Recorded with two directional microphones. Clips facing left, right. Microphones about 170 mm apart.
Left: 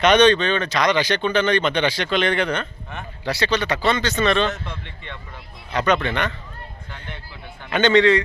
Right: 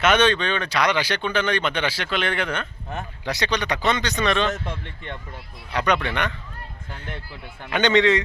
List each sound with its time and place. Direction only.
0.0 s speech: 5° right (ahead or behind)
5.7 s speech: 15° right (ahead or behind)
7.7 s speech: 15° right (ahead or behind)